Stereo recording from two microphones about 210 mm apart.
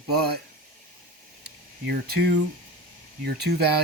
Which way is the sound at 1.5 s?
50° right (ahead or behind).